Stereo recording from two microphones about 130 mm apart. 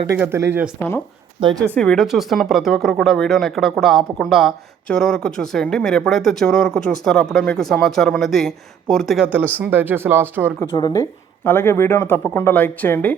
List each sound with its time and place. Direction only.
0.2 s speech: 20° right (ahead or behind)
0.8 s speech: 15° left (ahead or behind)
1.4 s a woman's voice: 35° right (ahead or behind)
1.7 s speech: 5° left (ahead or behind)
9.2 s speech: 15° right (ahead or behind)
10.6 s speech: 30° left (ahead or behind)